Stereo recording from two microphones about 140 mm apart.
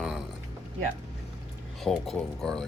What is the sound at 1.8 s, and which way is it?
Speech, centre (ahead or behind).